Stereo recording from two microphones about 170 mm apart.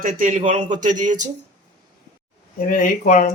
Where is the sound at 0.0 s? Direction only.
50° right (ahead or behind).